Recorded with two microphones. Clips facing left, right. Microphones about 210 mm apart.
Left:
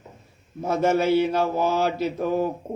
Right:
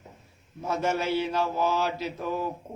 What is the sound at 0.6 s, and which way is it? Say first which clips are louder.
Mantra: left 7 dB; 50° left (ahead or behind).